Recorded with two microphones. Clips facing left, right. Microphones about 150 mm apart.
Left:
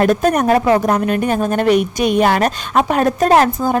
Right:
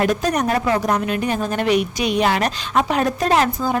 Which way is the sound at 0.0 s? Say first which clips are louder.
Left 5 dB; 50° left (ahead or behind).